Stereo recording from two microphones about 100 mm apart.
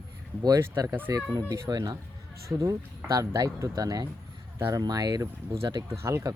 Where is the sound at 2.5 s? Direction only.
30° right (ahead or behind).